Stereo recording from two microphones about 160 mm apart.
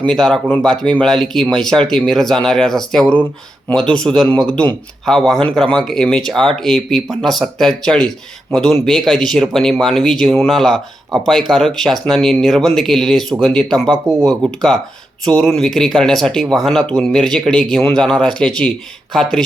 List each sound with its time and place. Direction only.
0.1 s speech: 5° left (ahead or behind)
13.8 s speech: 25° right (ahead or behind)
14.3 s speech: centre (ahead or behind)